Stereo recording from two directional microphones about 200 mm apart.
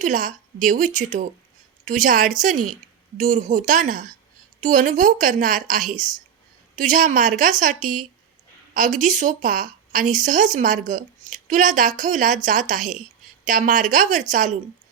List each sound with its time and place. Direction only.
0.0 s a woman's voice: 40° right (ahead or behind)